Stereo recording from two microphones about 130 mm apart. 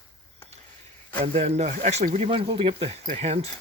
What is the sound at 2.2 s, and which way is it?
Speech, 45° right (ahead or behind).